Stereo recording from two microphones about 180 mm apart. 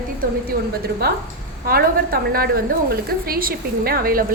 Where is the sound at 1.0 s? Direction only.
60° right (ahead or behind).